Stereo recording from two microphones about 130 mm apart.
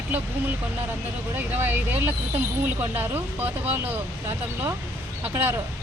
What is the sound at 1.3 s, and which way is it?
Speech, 15° right (ahead or behind).